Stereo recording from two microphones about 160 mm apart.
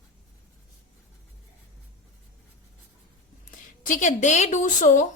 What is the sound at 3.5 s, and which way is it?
A woman's voice, 55° left (ahead or behind).